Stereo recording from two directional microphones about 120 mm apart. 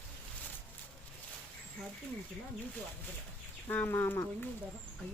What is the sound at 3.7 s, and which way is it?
Speech, 15° left (ahead or behind).